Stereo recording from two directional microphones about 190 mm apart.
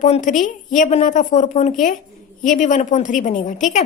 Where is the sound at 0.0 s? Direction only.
40° left (ahead or behind).